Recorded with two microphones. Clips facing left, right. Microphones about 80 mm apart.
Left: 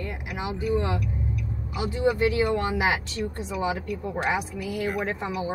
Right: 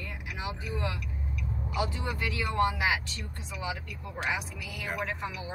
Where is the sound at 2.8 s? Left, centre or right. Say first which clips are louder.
Left 5 dB; left.